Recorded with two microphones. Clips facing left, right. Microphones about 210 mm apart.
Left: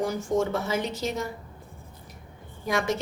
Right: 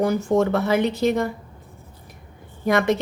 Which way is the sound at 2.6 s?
60° right (ahead or behind).